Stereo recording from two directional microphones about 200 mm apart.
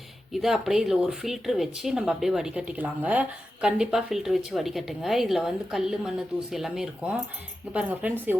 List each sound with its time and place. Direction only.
0.3 s speech: centre (ahead or behind)